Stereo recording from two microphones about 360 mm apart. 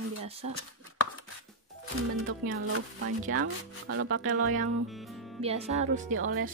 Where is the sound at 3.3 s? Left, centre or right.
Right.